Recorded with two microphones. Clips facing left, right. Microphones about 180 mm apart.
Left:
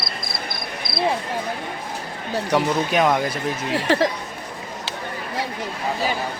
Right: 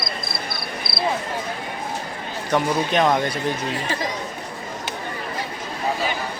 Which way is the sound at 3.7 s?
70° left (ahead or behind).